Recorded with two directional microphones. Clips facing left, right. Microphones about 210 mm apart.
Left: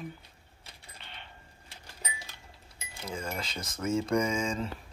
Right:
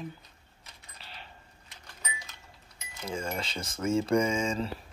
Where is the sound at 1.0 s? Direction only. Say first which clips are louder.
Right 2 dB; 35° right (ahead or behind).